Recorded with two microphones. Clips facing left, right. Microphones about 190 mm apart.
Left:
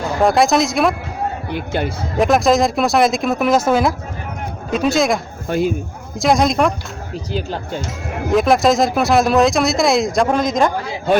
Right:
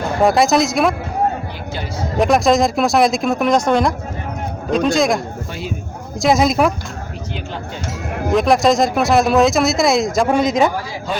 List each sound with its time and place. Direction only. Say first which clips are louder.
0.2 s speech: even; centre (ahead or behind)
1.5 s a man's voice: left 6 dB; 60° left (ahead or behind)
2.1 s speech: even; centre (ahead or behind)
5.5 s speech: left 10 dB; 50° left (ahead or behind)
6.1 s speech: even; centre (ahead or behind)
8.3 s speech: even; centre (ahead or behind)